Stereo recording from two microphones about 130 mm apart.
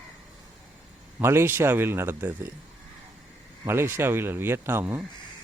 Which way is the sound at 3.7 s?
15° right (ahead or behind).